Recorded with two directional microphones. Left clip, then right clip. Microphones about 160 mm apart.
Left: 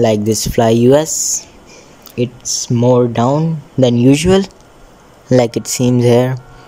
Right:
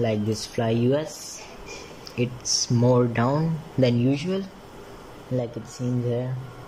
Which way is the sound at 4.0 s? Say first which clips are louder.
Left 15 dB; 55° left (ahead or behind).